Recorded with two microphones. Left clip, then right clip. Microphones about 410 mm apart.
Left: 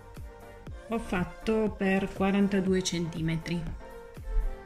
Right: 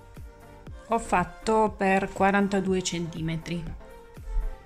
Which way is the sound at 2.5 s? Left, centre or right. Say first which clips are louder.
Right 2 dB; centre.